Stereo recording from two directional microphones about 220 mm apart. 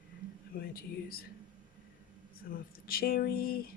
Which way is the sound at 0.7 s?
45° left (ahead or behind).